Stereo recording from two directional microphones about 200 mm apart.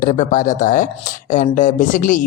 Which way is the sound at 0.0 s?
40° left (ahead or behind).